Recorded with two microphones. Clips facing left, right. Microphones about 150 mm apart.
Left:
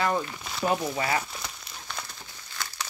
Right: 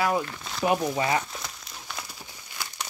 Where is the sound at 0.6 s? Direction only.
10° right (ahead or behind).